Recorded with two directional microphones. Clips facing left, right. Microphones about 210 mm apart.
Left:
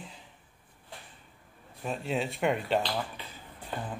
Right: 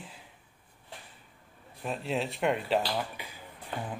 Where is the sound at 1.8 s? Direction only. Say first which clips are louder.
Even; centre (ahead or behind).